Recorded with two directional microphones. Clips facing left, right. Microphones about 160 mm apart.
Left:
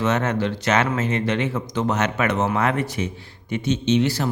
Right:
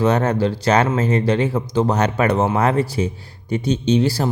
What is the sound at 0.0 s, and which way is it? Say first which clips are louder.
Speech: right 4 dB; 35° right (ahead or behind).